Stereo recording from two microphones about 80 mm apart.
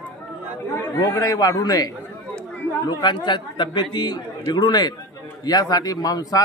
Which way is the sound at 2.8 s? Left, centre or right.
Left.